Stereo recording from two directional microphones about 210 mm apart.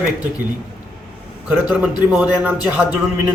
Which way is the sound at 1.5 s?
5° right (ahead or behind).